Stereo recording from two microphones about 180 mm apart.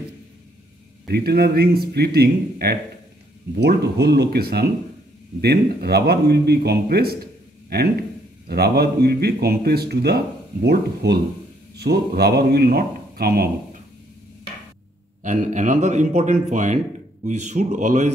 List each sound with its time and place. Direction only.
1.0 s speech: 60° right (ahead or behind)
8.5 s speech: 60° right (ahead or behind)
15.2 s speech: 45° right (ahead or behind)